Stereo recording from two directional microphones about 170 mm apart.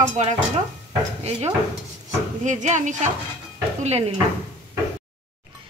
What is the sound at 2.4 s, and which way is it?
Speech, 45° right (ahead or behind).